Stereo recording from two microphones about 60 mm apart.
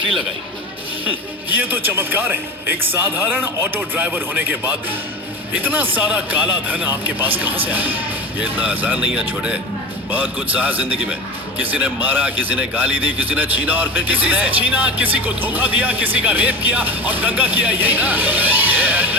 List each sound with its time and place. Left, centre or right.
1.0 s a man's voice: right